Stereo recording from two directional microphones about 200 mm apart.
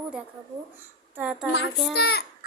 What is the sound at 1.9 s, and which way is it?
Speech, 55° left (ahead or behind).